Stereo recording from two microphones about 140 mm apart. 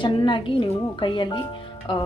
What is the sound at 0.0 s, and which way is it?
Speech, 35° left (ahead or behind).